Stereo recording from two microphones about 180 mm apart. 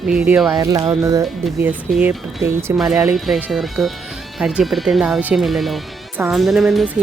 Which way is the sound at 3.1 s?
5° right (ahead or behind).